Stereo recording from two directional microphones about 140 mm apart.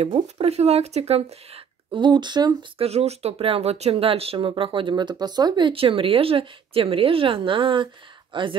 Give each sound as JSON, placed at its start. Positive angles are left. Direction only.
{"t": 0.0, "sound": "speech", "side_deg": -45}
{"t": 2.8, "sound": "speech", "side_deg": -45}